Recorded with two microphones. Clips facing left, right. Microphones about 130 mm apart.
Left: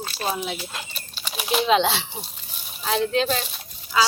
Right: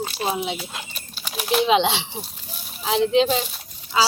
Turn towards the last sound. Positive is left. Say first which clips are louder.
# right 1 dB
turn(degrees=-20)  # may be behind; listen again after turning